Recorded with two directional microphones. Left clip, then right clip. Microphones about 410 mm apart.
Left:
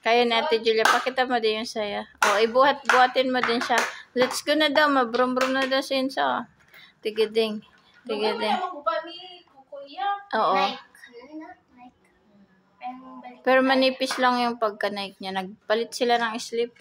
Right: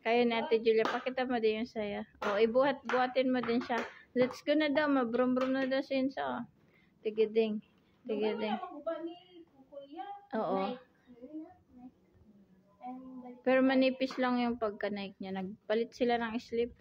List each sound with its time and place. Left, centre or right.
0.0 s speech: right
10.2 s child singing: right
13.4 s speech: right